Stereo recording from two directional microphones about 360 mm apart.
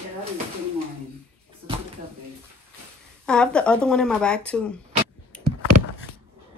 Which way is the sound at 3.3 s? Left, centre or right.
Centre.